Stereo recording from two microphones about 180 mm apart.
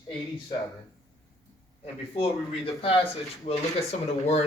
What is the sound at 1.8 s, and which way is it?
Speech, 30° left (ahead or behind).